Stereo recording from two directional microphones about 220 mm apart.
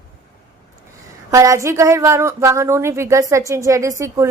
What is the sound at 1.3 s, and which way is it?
A woman's voice, 15° right (ahead or behind).